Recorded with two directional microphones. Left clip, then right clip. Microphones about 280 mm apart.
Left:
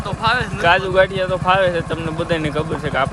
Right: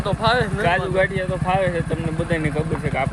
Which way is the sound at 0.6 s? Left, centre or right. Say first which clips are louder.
Left 5 dB; centre.